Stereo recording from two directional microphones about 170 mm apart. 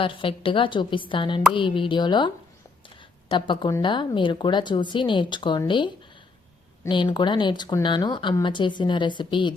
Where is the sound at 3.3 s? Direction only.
25° left (ahead or behind).